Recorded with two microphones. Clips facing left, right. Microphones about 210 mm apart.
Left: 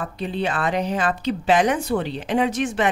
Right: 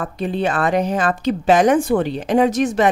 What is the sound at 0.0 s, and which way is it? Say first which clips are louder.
A woman's voice: right 4 dB; 45° right (ahead or behind).